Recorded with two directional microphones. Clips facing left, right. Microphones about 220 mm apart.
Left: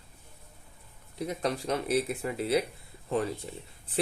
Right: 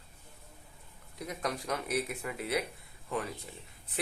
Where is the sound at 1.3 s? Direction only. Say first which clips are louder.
Left 5 dB; 30° left (ahead or behind).